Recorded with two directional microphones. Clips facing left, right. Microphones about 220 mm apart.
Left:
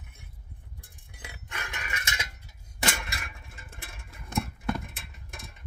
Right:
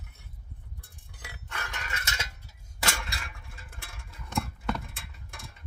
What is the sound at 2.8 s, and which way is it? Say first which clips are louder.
Dishes: left 2 dB; 20° left (ahead or behind).